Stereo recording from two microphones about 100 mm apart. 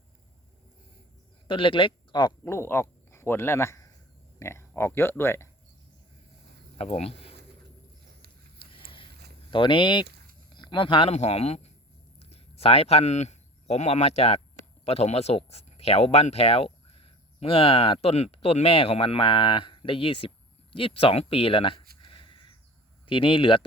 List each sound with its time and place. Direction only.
1.5 s speech: 60° left (ahead or behind)
2.4 s speech: 25° left (ahead or behind)
6.7 s speech: 90° left
8.5 s vehicle: 60° left (ahead or behind)
9.5 s speech: 55° left (ahead or behind); by 11.7 s 90° left
12.2 s a sound: 90° left
13.7 s speech: 90° left
17.0 s speech: 65° left (ahead or behind)
20.7 s a sound: 65° left (ahead or behind)
23.0 s speech: 60° left (ahead or behind)